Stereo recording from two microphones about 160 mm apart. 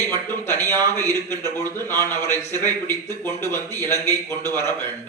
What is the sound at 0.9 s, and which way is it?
A man's voice, 15° left (ahead or behind).